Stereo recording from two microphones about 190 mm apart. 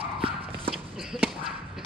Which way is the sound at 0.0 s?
30° right (ahead or behind).